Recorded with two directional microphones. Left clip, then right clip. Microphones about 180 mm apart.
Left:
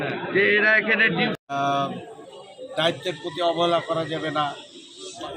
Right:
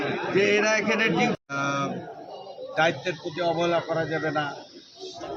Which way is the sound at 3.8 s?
Centre (ahead or behind).